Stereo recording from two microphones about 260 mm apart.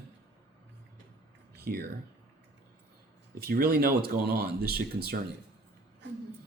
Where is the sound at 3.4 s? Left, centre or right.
Right.